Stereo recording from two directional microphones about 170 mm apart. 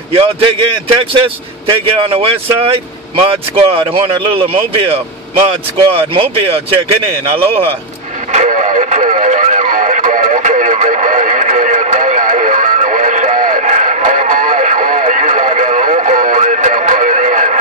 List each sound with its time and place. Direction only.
0.1 s a man's voice: 30° right (ahead or behind)
8.3 s radio: 45° right (ahead or behind)